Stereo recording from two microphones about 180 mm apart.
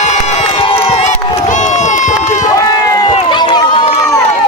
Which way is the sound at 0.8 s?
35° left (ahead or behind).